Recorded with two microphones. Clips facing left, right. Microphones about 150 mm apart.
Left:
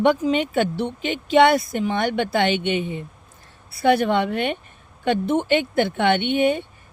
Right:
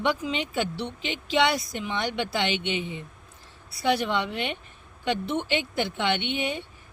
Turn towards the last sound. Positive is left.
turn(degrees=55)  # may be behind; listen again after turning